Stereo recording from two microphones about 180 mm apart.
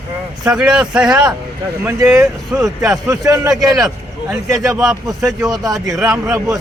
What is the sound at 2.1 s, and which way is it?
Speech, 20° right (ahead or behind).